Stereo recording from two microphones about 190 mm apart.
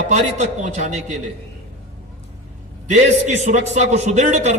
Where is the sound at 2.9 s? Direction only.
40° right (ahead or behind).